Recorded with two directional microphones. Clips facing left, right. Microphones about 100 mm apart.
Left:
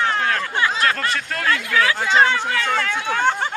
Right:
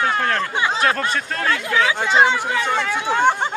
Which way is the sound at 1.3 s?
25° right (ahead or behind).